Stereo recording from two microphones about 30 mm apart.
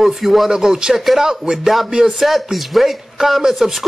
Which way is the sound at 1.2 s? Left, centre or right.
Centre.